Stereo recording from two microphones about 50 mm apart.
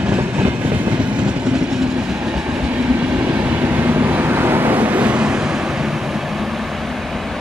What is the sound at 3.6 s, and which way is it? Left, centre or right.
Vehicle, right.